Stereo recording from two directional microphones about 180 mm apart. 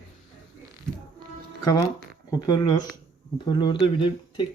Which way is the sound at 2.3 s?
25° left (ahead or behind).